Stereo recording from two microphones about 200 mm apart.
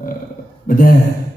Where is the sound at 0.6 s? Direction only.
45° left (ahead or behind).